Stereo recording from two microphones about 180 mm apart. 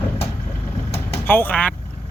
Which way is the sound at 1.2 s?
10° left (ahead or behind).